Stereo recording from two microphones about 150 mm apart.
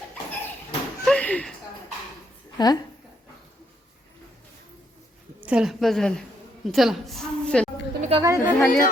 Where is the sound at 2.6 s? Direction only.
25° left (ahead or behind).